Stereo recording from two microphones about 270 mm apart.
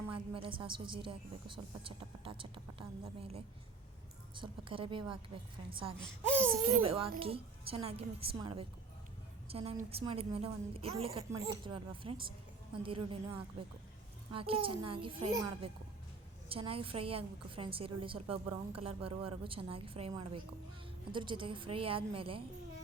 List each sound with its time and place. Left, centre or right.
0.1 s a woman's voice: centre